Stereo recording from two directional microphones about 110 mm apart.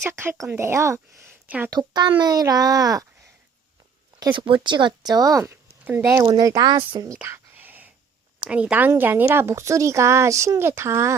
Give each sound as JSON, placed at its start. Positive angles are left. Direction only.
{"t": 0.0, "sound": "speech", "side_deg": -20}
{"t": 1.5, "sound": "speech", "side_deg": -15}
{"t": 1.7, "sound": "a child's voice", "side_deg": -35}
{"t": 4.2, "sound": "a child's voice", "side_deg": -45}
{"t": 7.3, "sound": "whispering", "side_deg": -20}
{"t": 8.4, "sound": "speech", "side_deg": -10}